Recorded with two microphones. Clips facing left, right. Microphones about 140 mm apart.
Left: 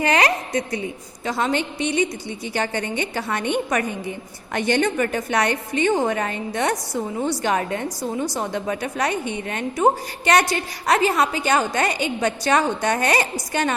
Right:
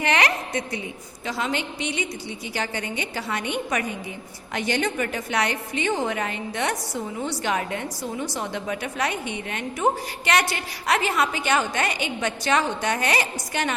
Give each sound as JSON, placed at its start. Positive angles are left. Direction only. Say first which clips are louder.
{"t": 0.0, "sound": "a woman's voice", "louder": "left 3 dB", "side_deg": 35}